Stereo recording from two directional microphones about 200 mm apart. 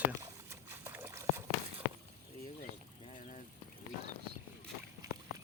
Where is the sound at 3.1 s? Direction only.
35° left (ahead or behind).